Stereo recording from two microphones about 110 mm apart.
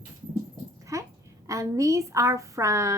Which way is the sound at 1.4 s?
30° right (ahead or behind).